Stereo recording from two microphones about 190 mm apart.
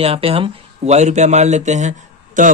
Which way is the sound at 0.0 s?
30° right (ahead or behind).